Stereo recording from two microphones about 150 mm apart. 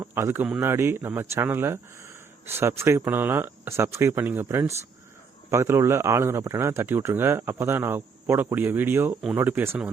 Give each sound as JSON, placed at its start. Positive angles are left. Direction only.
{"t": 0.0, "sound": "speech", "side_deg": -15}